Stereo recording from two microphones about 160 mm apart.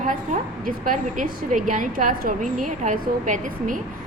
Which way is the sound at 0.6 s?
55° right (ahead or behind).